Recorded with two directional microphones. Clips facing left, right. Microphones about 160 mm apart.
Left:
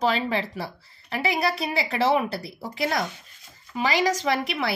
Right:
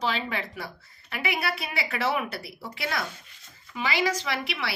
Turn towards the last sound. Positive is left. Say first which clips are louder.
# left 6 dB
turn(degrees=40)  # may be behind; listen again after turning